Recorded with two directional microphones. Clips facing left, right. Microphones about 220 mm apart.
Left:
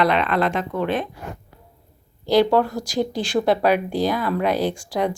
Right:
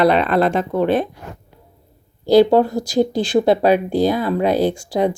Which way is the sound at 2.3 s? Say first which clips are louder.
Right 5 dB; 25° right (ahead or behind).